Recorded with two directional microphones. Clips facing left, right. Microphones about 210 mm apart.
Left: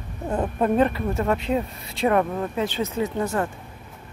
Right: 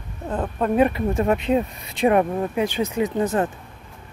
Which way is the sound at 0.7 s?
15° right (ahead or behind).